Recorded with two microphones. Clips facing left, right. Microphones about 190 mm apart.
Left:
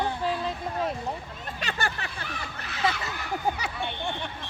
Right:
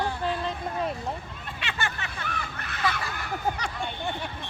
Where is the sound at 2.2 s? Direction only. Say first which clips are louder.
Right 2 dB; 55° right (ahead or behind).